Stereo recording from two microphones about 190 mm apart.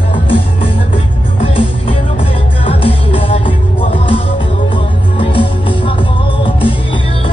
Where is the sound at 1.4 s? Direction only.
30° left (ahead or behind).